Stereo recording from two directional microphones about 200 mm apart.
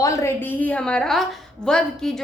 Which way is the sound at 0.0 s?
15° left (ahead or behind).